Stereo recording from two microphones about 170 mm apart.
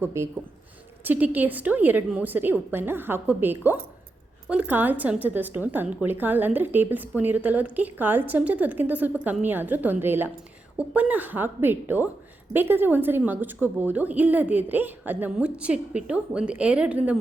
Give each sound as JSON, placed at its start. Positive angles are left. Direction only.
{"t": 0.0, "sound": "a woman's voice", "side_deg": -15}